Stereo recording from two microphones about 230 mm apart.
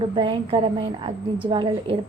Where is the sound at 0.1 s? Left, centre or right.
Right.